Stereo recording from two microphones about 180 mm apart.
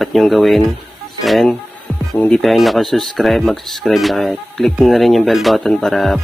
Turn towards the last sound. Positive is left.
turn(degrees=0)  # may be behind; listen again after turning